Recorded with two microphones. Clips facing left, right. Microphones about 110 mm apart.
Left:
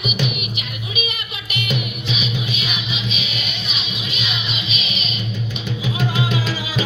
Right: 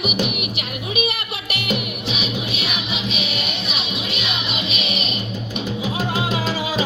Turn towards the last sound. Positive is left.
turn(degrees=-40)  # may be behind; listen again after turning